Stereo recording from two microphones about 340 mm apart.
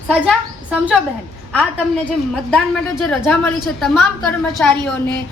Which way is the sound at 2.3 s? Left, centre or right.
Centre.